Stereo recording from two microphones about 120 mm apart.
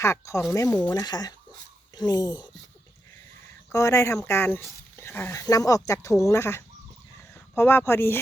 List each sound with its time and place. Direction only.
0.0 s speech: 25° left (ahead or behind)
3.7 s speech: 25° left (ahead or behind)